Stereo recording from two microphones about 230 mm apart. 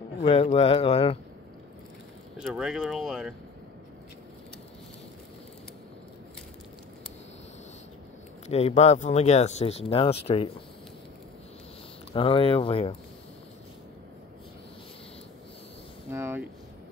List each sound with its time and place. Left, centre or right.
0.2 s speech: left
2.3 s speech: centre
8.5 s speech: left
12.1 s speech: left
16.1 s speech: centre